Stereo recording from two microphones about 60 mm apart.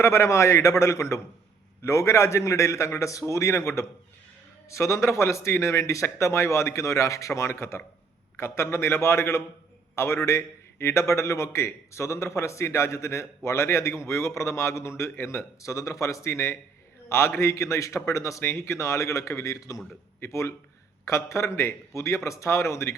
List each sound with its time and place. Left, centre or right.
0.0 s a man's voice: left
19.5 s a man's voice: left
21.0 s a man's voice: left